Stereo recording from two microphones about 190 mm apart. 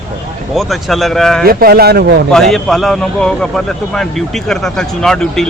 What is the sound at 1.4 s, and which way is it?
Speech, 50° right (ahead or behind).